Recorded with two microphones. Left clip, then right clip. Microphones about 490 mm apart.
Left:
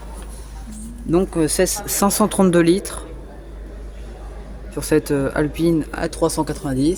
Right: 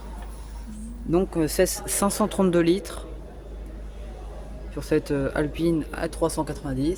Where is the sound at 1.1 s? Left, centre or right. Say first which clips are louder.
Left 5 dB; right.